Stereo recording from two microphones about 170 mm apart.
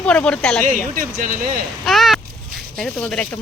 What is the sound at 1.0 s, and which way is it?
Speech, 55° right (ahead or behind).